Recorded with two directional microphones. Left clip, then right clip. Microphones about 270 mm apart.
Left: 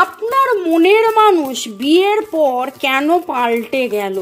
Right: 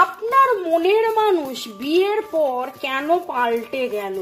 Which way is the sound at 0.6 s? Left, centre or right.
Left.